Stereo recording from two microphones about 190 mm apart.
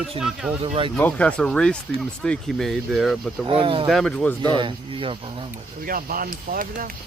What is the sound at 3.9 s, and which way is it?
Speech, centre (ahead or behind).